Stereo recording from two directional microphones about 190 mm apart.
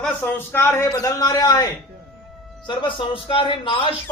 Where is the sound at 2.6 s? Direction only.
25° left (ahead or behind).